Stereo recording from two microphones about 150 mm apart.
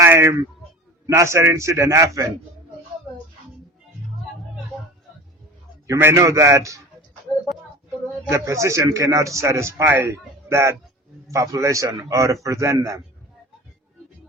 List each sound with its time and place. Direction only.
0.0 s a sound: 20° right (ahead or behind)
1.0 s a man's voice: 20° right (ahead or behind)
5.9 s a man's voice: 20° right (ahead or behind)
8.3 s a man's voice: 20° right (ahead or behind)